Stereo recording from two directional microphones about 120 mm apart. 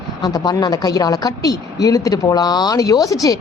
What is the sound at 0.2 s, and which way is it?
A woman's voice, 35° left (ahead or behind).